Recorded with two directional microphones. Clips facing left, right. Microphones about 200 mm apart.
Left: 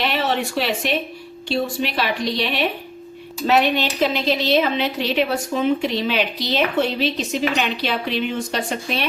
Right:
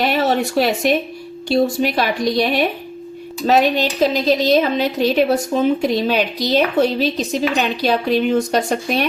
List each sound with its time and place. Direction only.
0.0 s a woman's voice: 45° right (ahead or behind)